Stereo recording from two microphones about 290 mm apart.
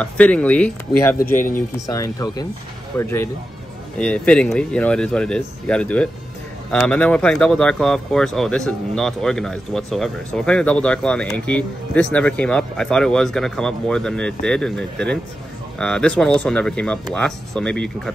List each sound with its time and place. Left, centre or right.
0.0 s speech: centre
1.2 s speech: left
1.9 s speech: centre